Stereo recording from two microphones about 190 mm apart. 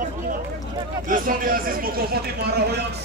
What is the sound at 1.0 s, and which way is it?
Speech, 45° right (ahead or behind).